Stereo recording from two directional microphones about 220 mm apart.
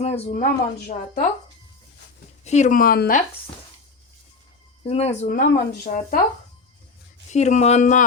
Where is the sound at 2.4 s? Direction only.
30° left (ahead or behind).